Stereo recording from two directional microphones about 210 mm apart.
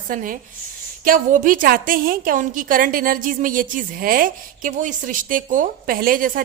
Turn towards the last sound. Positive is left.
turn(degrees=-40)  # may be behind; listen again after turning